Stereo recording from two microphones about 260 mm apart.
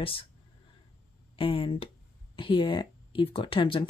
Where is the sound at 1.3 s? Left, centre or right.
Centre.